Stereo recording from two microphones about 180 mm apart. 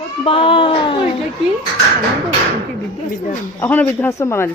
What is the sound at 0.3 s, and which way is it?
Speech, 30° left (ahead or behind).